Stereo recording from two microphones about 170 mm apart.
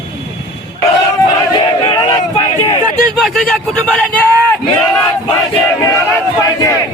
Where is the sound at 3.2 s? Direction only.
Centre (ahead or behind).